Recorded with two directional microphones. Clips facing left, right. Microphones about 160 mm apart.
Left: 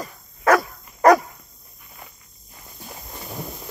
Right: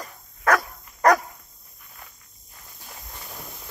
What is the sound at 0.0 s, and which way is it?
Dog, 10° left (ahead or behind).